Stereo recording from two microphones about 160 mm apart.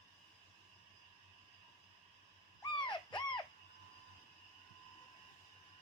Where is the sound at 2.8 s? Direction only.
30° left (ahead or behind).